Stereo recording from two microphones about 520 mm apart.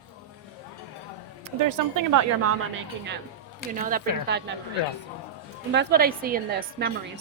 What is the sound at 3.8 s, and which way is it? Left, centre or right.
Speech, centre.